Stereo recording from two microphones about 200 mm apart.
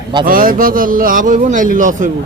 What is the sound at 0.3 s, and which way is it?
A man's voice, 45° right (ahead or behind).